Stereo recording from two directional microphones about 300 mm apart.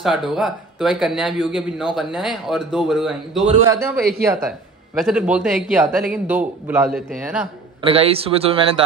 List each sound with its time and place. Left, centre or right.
0.0 s a man's voice: centre
7.8 s speech: centre